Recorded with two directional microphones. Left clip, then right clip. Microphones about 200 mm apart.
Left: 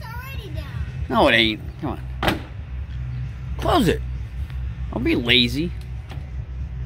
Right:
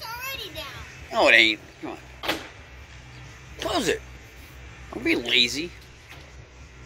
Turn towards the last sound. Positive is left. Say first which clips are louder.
# left 3 dB
turn(degrees=10)  # may be behind; listen again after turning